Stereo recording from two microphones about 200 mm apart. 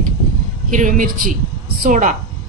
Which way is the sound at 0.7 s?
40° right (ahead or behind).